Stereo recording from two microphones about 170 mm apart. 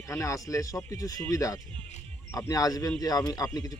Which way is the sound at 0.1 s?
20° left (ahead or behind).